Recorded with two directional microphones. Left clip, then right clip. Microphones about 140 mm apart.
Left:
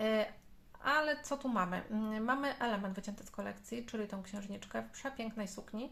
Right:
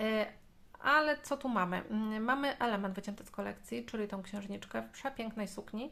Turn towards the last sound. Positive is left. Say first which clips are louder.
# right 2 dB
turn(degrees=-35)  # may be behind; listen again after turning